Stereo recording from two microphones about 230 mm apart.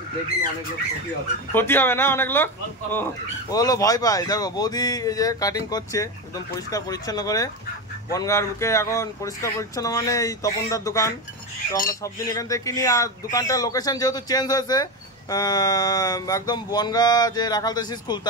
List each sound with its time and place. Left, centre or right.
1.5 s speech: centre